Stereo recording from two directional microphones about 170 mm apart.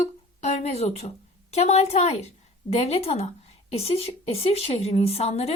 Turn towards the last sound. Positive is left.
turn(degrees=40)  # may be behind; listen again after turning